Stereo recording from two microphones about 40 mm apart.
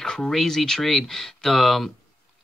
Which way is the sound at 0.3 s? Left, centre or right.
Centre.